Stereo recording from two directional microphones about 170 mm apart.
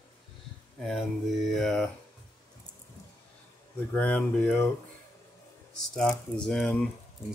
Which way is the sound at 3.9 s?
10° left (ahead or behind).